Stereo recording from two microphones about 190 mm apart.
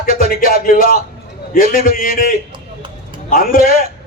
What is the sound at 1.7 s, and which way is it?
Speech, 45° left (ahead or behind).